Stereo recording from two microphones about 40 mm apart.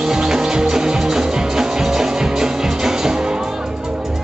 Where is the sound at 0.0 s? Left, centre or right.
Centre.